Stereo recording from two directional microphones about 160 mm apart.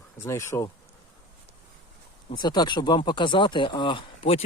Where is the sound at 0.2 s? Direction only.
15° left (ahead or behind).